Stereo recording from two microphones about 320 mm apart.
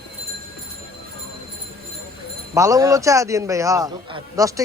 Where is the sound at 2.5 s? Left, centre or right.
Centre.